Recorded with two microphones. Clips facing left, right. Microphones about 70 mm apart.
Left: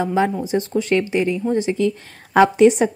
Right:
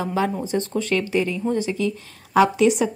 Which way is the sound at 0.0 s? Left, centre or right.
Left.